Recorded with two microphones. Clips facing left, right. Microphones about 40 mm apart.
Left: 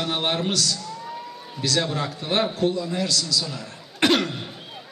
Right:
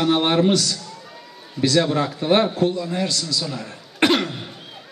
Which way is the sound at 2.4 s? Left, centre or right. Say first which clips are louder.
Left 2 dB; centre.